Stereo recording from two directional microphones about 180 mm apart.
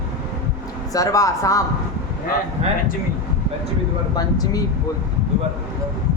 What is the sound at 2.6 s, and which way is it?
Speech, 35° right (ahead or behind).